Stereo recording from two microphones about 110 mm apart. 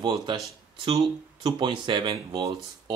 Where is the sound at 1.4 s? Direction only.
45° right (ahead or behind).